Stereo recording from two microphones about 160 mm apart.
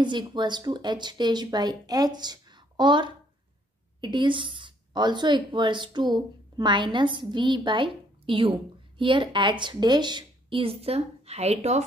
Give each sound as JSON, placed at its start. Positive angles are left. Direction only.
{"t": 0.0, "sound": "a woman's voice", "side_deg": -30}